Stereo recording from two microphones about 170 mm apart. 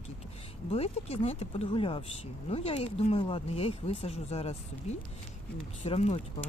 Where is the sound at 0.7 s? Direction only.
35° left (ahead or behind).